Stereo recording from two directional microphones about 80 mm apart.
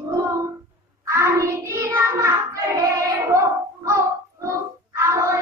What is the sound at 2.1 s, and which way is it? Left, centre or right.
Music, right.